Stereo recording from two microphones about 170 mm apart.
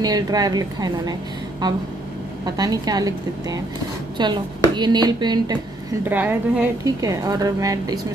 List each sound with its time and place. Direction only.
0.0 s speech: 20° right (ahead or behind)
2.4 s speech: 20° right (ahead or behind)
6.0 s a woman's voice: 10° right (ahead or behind)
7.0 s speech: 20° right (ahead or behind)